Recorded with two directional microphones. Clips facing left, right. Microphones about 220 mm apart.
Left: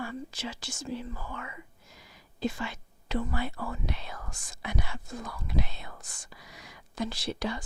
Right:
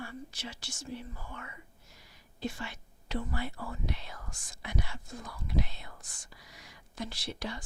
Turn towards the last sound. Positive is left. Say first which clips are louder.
# left 6 dB
turn(degrees=90)